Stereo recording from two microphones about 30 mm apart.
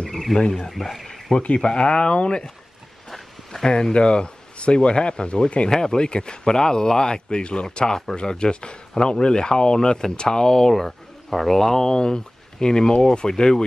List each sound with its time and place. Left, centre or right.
0.1 s a sound: centre
0.5 s speech: centre
1.4 s speech: left
1.7 s speech: left
3.6 s speech: left
3.9 s speech: left
5.7 s speech: left
10.7 s speech: centre; by 13.7 s left